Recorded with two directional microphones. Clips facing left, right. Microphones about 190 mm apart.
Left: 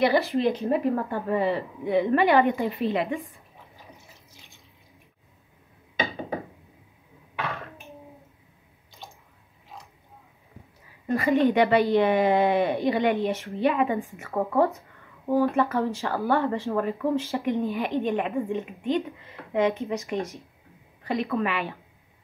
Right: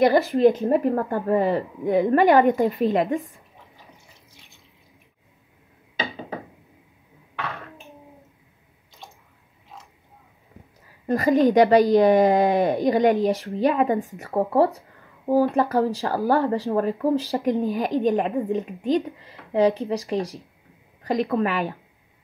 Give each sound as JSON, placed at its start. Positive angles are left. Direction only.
{"t": 0.0, "sound": "a woman's voice", "side_deg": -50}
{"t": 11.1, "sound": "speech", "side_deg": -40}